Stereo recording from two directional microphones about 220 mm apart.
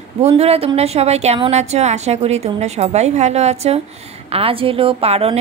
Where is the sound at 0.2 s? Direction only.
30° right (ahead or behind).